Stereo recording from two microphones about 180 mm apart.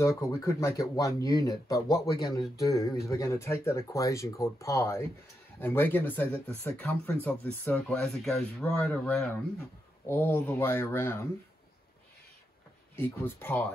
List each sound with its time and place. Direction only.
0.2 s speech: 15° left (ahead or behind)
12.9 s speech: 10° left (ahead or behind)